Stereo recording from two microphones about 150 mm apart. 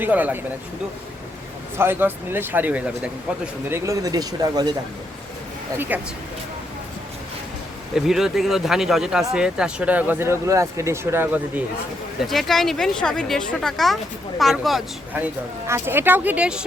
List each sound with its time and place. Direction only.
0.0 s speech: 10° right (ahead or behind)
1.8 s speech: 15° right (ahead or behind)
3.7 s speech: 20° right (ahead or behind)
5.7 s speech: 15° right (ahead or behind)
7.9 s a woman's voice: centre (ahead or behind)
12.2 s a woman's voice: centre (ahead or behind)
15.6 s speech: 15° right (ahead or behind)